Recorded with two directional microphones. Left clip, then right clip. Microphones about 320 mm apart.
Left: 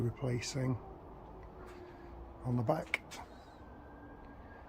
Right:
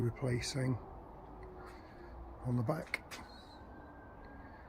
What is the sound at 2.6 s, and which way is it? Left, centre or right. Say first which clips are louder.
Speech: left 4 dB; centre.